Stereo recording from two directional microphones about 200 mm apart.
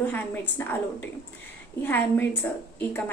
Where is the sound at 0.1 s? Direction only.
10° left (ahead or behind).